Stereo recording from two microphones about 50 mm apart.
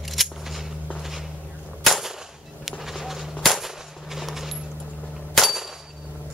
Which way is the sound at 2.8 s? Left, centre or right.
Centre.